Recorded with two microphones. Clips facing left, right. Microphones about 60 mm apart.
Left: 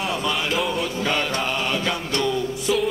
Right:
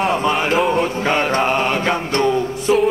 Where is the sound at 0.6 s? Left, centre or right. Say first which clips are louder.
Right 7 dB; right.